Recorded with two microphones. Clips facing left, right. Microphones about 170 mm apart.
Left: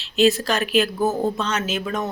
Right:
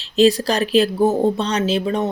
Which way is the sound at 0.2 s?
35° right (ahead or behind).